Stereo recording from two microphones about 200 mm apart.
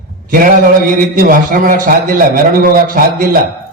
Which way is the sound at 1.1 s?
45° right (ahead or behind).